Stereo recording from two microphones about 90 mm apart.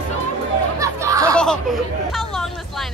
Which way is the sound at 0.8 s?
35° right (ahead or behind).